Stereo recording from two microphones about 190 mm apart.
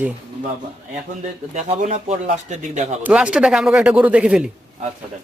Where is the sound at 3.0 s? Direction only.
5° right (ahead or behind).